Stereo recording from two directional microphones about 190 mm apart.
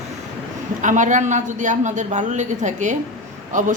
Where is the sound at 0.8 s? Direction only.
40° right (ahead or behind).